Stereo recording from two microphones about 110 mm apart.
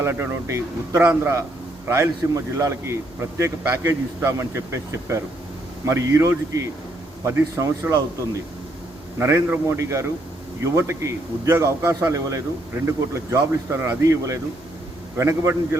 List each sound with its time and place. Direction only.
0.0 s a man's voice: 20° right (ahead or behind)
9.1 s a man's voice: 20° right (ahead or behind)
15.2 s a man's voice: 25° right (ahead or behind)